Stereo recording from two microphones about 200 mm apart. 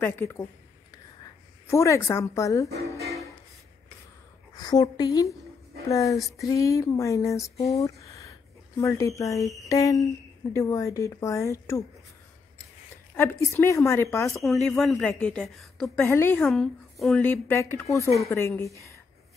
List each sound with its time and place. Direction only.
0.0 s speech: 10° left (ahead or behind)
1.7 s speech: 15° left (ahead or behind)
4.6 s a woman's voice: 20° left (ahead or behind)
13.1 s speech: 10° left (ahead or behind)
14.4 s a woman's voice: centre (ahead or behind)
16.0 s speech: 10° left (ahead or behind)
16.4 s speech: centre (ahead or behind)